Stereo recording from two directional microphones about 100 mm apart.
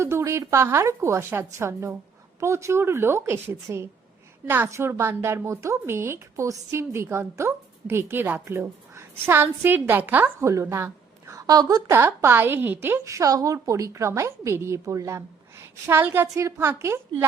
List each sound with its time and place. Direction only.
0.0 s a woman's voice: 25° right (ahead or behind)
11.9 s a woman's voice: 25° right (ahead or behind)